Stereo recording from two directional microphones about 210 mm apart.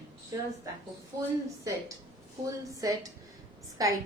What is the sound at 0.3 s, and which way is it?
Speech, 15° right (ahead or behind).